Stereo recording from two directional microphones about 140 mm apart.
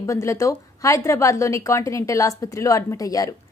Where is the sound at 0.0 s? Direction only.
20° left (ahead or behind).